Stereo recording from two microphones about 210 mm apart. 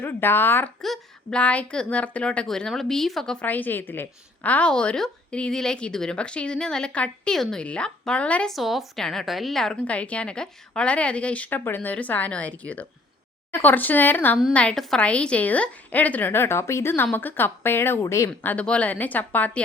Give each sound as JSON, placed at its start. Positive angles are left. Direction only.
{"t": 0.0, "sound": "a woman's voice", "side_deg": 10}